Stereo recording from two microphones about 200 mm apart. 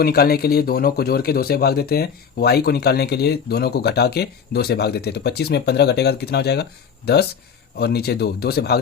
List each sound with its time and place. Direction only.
0.0 s speech: 50° left (ahead or behind)